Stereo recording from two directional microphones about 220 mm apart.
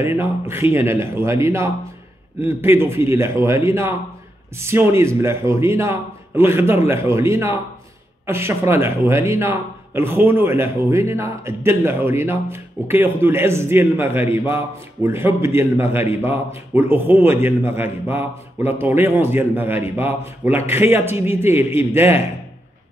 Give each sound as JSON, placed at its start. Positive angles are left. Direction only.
{"t": 0.0, "sound": "a man's voice", "side_deg": -10}